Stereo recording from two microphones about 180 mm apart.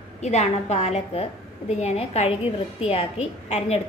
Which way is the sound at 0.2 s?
40° left (ahead or behind).